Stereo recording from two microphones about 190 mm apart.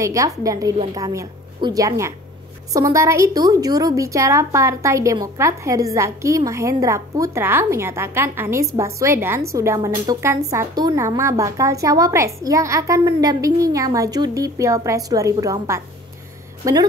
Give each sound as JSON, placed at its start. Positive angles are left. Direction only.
{"t": 0.0, "sound": "a woman's voice", "side_deg": -15}